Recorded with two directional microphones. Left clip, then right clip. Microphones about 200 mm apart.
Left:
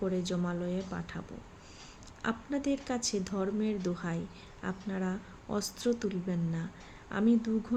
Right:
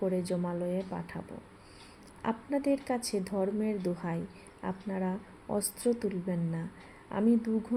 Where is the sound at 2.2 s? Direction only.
15° left (ahead or behind).